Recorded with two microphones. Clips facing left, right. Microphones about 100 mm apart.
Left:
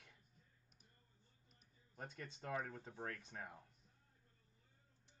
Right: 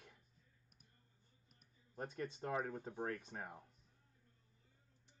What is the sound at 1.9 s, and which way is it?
Speech, 40° right (ahead or behind).